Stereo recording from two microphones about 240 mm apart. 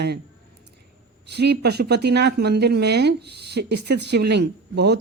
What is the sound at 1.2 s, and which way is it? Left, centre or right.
Speech, right.